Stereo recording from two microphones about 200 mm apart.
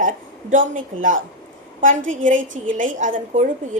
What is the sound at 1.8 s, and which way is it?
A woman's voice, 40° right (ahead or behind).